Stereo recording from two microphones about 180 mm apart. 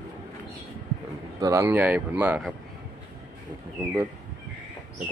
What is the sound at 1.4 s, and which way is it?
Speech, 15° right (ahead or behind).